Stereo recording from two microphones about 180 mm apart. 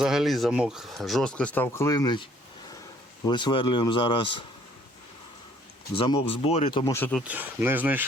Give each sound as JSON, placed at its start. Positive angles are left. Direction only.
{"t": 0.0, "sound": "speech", "side_deg": 0}
{"t": 3.2, "sound": "speech", "side_deg": 25}
{"t": 5.9, "sound": "speech", "side_deg": 30}
{"t": 6.9, "sound": "speech", "side_deg": 10}
{"t": 7.2, "sound": "speech", "side_deg": -10}